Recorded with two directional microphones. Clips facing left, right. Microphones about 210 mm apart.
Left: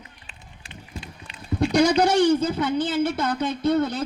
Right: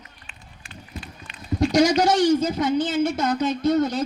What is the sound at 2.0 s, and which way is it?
Speech, 55° left (ahead or behind).